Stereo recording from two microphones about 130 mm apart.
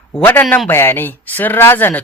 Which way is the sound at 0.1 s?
15° left (ahead or behind).